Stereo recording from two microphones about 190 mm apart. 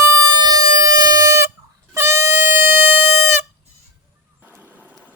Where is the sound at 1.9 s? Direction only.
15° right (ahead or behind).